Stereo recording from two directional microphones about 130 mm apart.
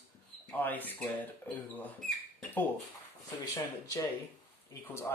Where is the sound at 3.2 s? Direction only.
25° left (ahead or behind).